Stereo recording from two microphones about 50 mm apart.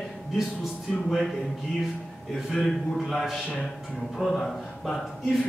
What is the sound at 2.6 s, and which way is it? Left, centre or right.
Speech, centre.